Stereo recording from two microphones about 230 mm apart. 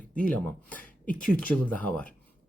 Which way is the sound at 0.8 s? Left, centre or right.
Left.